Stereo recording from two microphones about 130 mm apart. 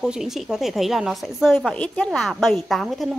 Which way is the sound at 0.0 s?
5° right (ahead or behind).